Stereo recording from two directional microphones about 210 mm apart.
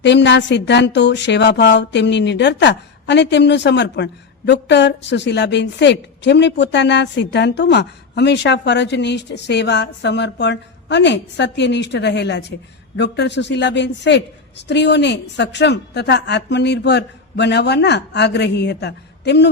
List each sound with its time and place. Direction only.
0.0 s a woman's voice: 55° left (ahead or behind)